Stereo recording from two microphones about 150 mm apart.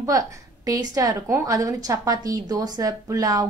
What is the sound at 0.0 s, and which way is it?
A woman's voice, 25° right (ahead or behind).